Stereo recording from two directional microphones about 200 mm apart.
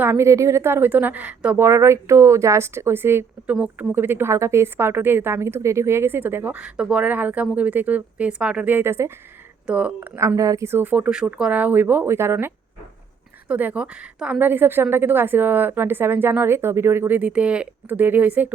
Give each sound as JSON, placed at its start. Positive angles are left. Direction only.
{"t": 0.0, "sound": "a woman's voice", "side_deg": -10}